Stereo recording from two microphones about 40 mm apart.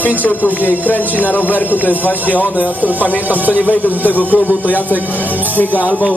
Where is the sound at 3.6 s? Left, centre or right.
Left.